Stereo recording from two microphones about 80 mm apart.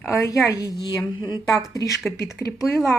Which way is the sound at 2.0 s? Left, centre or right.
Centre.